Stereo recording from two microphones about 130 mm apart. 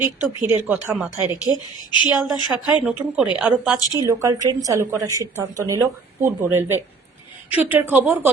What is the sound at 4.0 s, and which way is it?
A woman's voice, 25° right (ahead or behind).